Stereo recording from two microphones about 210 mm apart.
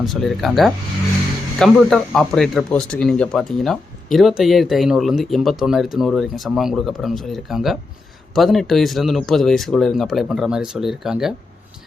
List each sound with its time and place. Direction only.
0.0 s speech: centre (ahead or behind)